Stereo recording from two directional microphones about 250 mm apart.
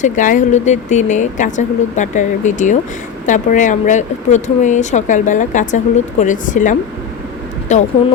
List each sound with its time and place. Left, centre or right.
0.0 s speech: left